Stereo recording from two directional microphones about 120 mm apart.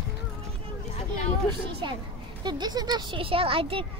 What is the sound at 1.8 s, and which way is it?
A child's voice, 40° right (ahead or behind).